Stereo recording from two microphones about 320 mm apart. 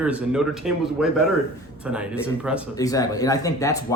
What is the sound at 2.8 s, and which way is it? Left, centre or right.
Speech, centre.